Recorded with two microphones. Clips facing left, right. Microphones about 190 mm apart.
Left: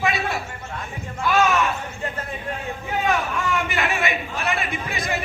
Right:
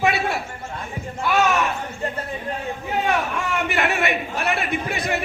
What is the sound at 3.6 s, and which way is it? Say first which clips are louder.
A woman's voice: right 2 dB; 60° right (ahead or behind).